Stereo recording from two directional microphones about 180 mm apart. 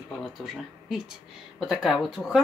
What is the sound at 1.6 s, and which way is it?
Speech, centre (ahead or behind).